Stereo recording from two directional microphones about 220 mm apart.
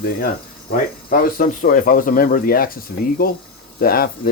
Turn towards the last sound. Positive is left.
turn(degrees=40)  # may be behind; listen again after turning